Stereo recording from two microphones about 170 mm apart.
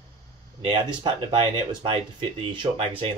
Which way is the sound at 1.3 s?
30° right (ahead or behind).